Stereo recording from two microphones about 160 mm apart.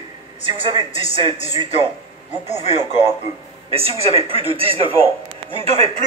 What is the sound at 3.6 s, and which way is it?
A man's voice, 35° right (ahead or behind).